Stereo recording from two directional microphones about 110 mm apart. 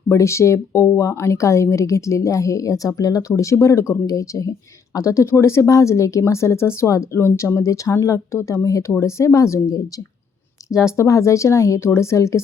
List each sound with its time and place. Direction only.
0.1 s speech: 25° left (ahead or behind)
10.7 s speech: 5° right (ahead or behind)
10.9 s speech: 25° left (ahead or behind)